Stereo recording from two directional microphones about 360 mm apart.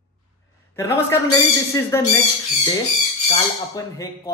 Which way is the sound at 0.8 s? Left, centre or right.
Centre.